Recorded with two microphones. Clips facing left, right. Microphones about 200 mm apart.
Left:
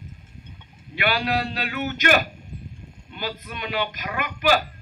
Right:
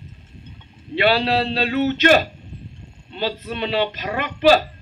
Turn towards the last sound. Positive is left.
turn(degrees=-30)  # may be behind; listen again after turning